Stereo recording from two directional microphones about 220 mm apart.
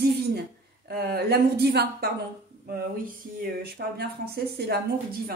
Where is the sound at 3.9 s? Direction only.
45° right (ahead or behind).